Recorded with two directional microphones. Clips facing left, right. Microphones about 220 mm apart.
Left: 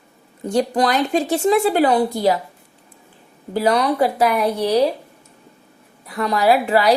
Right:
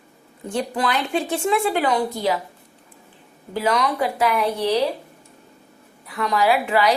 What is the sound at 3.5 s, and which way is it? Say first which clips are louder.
Speech: left 4 dB; 35° left (ahead or behind).